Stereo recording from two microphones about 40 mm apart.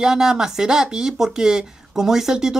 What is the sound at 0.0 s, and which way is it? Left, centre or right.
A woman's voice, centre.